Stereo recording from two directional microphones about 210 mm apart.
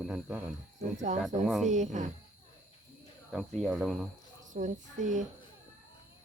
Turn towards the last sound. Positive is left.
turn(degrees=-35)  # may be behind; listen again after turning